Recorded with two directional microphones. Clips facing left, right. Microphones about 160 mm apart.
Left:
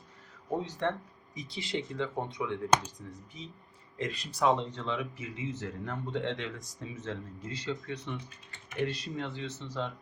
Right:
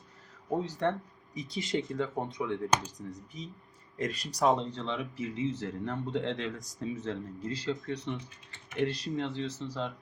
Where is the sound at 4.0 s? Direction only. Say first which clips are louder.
Right 1 dB; 40° right (ahead or behind).